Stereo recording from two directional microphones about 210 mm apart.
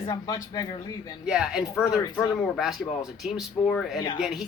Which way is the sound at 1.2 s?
5° right (ahead or behind).